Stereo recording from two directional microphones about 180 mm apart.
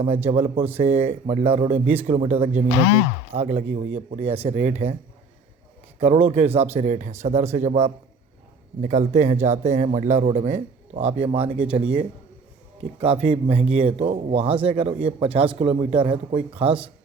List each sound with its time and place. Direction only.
0.3 s a man's voice: 30° right (ahead or behind)
6.0 s a man's voice: 35° right (ahead or behind)
13.0 s a man's voice: 30° right (ahead or behind)